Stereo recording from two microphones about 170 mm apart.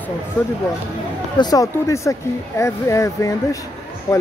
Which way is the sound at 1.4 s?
20° left (ahead or behind).